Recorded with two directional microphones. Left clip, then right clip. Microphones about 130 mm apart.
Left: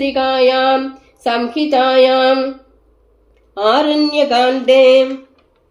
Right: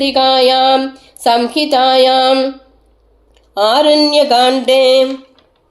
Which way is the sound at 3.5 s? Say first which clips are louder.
Right 4 dB; 30° right (ahead or behind).